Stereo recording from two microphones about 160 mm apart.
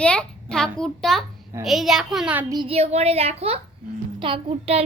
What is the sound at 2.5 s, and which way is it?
A child's voice, 35° right (ahead or behind).